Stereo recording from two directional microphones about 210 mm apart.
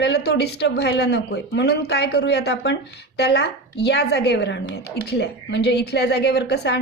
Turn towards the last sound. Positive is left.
turn(degrees=50)  # may be behind; listen again after turning